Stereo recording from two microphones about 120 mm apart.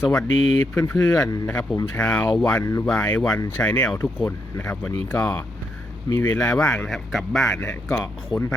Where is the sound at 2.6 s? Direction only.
25° left (ahead or behind).